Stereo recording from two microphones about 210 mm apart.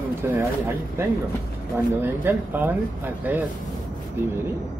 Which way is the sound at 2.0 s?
10° right (ahead or behind).